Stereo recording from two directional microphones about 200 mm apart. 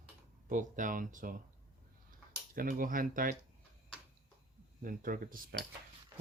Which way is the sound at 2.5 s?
45° right (ahead or behind).